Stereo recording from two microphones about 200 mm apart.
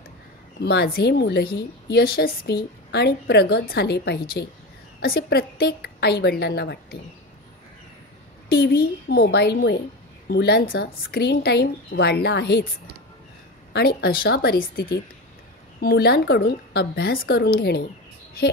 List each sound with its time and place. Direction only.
0.6 s a woman's voice: 55° left (ahead or behind)
8.5 s a woman's voice: 50° left (ahead or behind)
13.7 s speech: 50° left (ahead or behind)